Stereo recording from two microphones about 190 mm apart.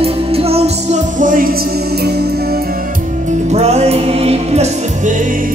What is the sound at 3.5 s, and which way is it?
Music, 35° right (ahead or behind).